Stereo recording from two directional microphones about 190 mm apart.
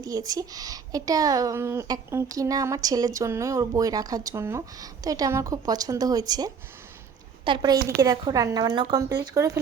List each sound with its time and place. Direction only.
0.0 s a woman's voice: 20° right (ahead or behind)